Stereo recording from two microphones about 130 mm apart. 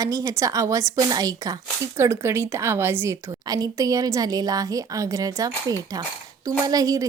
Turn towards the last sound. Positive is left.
turn(degrees=-25)  # may be behind; listen again after turning